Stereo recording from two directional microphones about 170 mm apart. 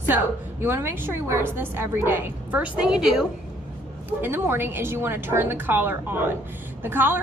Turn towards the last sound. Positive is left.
turn(degrees=-10)  # may be behind; listen again after turning